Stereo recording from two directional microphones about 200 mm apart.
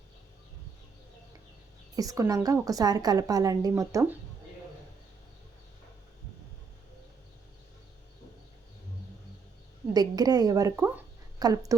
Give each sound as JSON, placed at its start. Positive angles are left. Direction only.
{"t": 2.0, "sound": "a woman's voice", "side_deg": -15}
{"t": 9.9, "sound": "speech", "side_deg": -20}